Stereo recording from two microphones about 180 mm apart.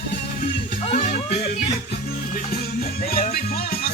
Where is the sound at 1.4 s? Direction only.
55° left (ahead or behind).